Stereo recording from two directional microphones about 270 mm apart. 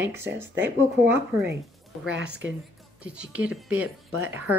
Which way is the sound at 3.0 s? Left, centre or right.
Centre.